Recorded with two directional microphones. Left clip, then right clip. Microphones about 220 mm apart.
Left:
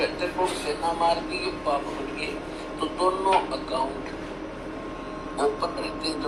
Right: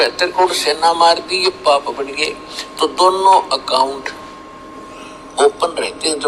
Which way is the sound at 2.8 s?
50° right (ahead or behind).